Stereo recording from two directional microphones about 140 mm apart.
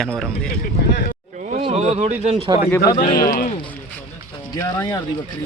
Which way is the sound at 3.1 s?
90° left.